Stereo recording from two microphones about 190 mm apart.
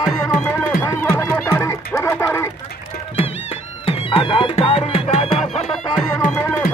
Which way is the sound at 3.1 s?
30° left (ahead or behind).